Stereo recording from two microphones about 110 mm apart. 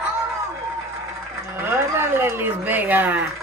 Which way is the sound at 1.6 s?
20° right (ahead or behind).